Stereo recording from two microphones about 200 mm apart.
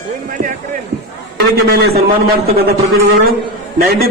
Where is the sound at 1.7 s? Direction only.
50° right (ahead or behind).